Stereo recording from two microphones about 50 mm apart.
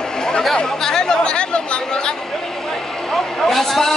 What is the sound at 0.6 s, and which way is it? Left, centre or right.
Speech, centre.